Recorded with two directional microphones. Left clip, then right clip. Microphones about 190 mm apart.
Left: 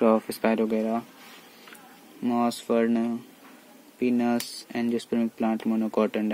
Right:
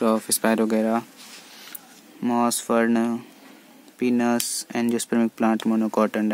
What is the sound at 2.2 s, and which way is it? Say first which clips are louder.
Speech: right 4 dB; 30° right (ahead or behind).